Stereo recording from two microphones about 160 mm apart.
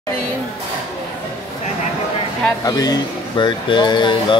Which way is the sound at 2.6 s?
25° left (ahead or behind).